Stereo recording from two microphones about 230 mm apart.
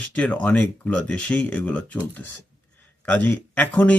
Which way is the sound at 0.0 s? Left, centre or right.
Centre.